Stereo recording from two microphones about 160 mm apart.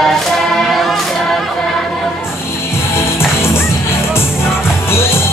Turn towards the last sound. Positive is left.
turn(degrees=15)  # may be behind; listen again after turning